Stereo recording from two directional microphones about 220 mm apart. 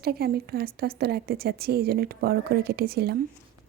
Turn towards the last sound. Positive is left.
turn(degrees=-45)  # may be behind; listen again after turning